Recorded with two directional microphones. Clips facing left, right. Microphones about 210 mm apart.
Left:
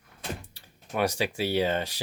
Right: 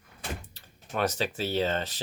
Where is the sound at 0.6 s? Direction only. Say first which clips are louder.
Left 2 dB; 10° left (ahead or behind).